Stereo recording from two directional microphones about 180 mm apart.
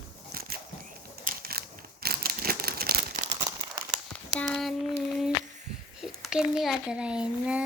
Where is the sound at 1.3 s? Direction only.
55° right (ahead or behind).